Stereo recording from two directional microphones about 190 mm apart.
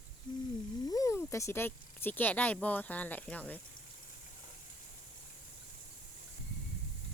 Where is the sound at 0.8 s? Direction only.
15° left (ahead or behind).